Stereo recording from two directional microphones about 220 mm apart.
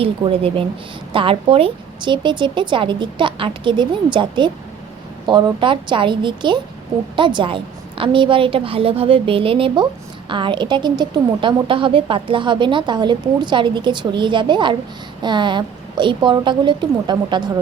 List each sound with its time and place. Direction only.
0.0 s a woman's voice: 25° right (ahead or behind)